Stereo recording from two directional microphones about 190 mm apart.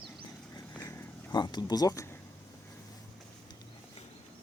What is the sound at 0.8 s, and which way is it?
Vehicle, 15° left (ahead or behind).